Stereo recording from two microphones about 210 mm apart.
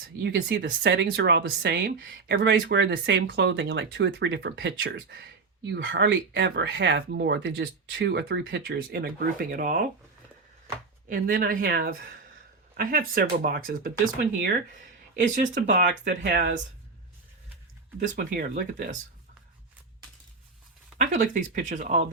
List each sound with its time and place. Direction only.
0.2 s speech: 50° right (ahead or behind)
11.1 s speech: 45° right (ahead or behind)
18.0 s speech: 40° right (ahead or behind)
21.0 s speech: 40° right (ahead or behind)